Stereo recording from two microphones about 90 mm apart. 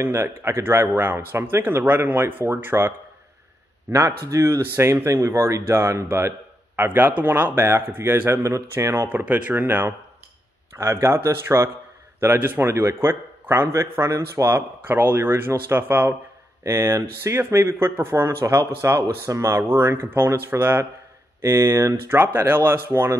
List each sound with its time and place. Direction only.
0.0 s speech: 30° right (ahead or behind)
9.2 s speech: 15° right (ahead or behind)